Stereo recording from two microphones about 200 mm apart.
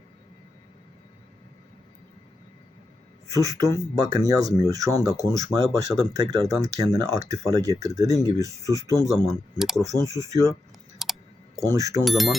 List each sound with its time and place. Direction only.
3.3 s speech: 15° right (ahead or behind)
9.6 s speech: centre (ahead or behind)
9.8 s speech: 15° right (ahead or behind)
11.0 s a sound: centre (ahead or behind)
11.5 s speech: 15° right (ahead or behind)
12.0 s speech: centre (ahead or behind)